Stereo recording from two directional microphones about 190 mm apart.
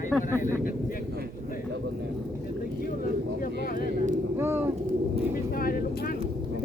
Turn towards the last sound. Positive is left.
turn(degrees=50)  # may be behind; listen again after turning